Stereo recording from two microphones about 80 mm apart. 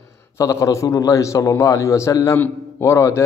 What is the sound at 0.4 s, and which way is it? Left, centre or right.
A man's voice, left.